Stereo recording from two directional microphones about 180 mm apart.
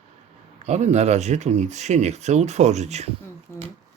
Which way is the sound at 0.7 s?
40° right (ahead or behind).